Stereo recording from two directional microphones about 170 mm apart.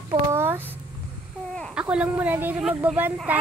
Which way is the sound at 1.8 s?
5° right (ahead or behind).